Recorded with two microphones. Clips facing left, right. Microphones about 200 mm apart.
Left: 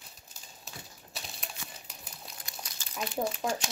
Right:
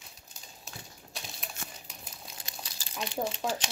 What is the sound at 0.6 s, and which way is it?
Crumpling, centre (ahead or behind).